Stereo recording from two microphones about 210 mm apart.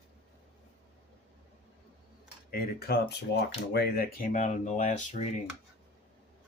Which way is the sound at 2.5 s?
50° left (ahead or behind).